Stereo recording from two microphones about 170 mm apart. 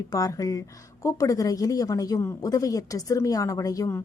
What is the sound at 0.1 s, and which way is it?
A woman's voice, 20° left (ahead or behind).